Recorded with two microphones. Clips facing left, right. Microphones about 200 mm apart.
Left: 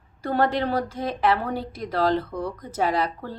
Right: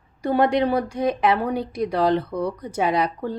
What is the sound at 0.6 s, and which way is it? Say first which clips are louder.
Speech: right 4 dB; 15° right (ahead or behind).